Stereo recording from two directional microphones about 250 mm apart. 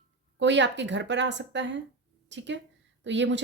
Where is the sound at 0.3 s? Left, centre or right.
Right.